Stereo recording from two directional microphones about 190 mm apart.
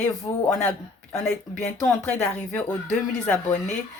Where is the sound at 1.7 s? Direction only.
Centre (ahead or behind).